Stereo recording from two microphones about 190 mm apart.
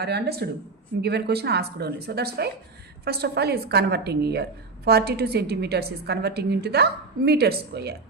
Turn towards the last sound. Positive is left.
turn(degrees=-55)  # may be behind; listen again after turning